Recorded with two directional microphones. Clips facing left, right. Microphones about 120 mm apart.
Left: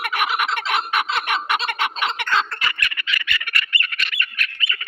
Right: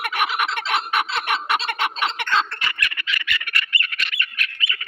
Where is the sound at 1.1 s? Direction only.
30° right (ahead or behind).